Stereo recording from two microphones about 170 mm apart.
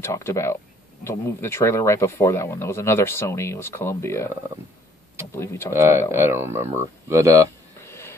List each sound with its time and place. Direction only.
0.0 s speech: 15° left (ahead or behind)
5.3 s speech: 15° left (ahead or behind)
5.7 s speech: 15° right (ahead or behind)
7.8 s a sound: 15° left (ahead or behind)